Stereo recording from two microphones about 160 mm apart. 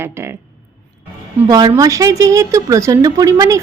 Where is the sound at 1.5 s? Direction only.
25° right (ahead or behind).